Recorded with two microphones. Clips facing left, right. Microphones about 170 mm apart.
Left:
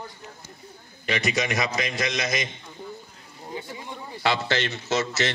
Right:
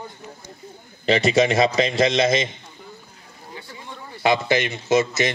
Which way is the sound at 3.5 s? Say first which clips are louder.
Left 3 dB; 15° left (ahead or behind).